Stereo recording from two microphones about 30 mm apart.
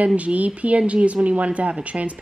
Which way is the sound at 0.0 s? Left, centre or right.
Right.